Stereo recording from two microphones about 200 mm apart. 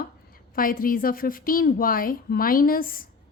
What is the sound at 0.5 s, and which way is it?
A woman's voice, 45° left (ahead or behind).